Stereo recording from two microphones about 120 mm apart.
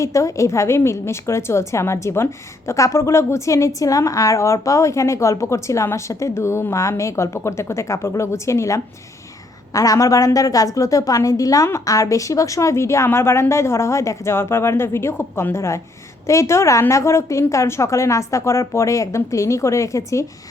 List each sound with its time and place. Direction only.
0.0 s a woman's voice: 25° left (ahead or behind)